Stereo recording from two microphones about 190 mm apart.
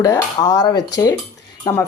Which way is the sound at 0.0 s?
20° left (ahead or behind).